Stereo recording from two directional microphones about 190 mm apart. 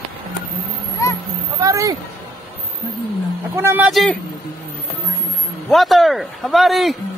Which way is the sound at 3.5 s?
10° right (ahead or behind).